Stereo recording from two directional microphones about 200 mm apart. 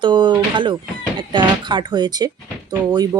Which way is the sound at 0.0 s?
25° right (ahead or behind).